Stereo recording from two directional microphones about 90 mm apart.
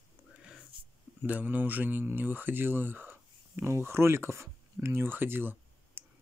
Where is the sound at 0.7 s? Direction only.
75° right (ahead or behind).